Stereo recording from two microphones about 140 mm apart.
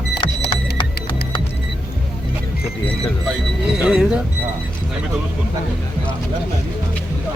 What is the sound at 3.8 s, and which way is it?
Speech, 5° right (ahead or behind).